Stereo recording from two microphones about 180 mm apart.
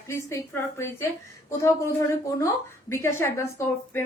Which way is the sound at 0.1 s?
15° left (ahead or behind).